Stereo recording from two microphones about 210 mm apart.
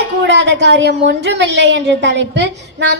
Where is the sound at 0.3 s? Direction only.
55° right (ahead or behind).